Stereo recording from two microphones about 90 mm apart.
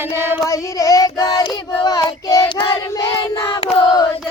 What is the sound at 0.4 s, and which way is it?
Child singing, 40° left (ahead or behind).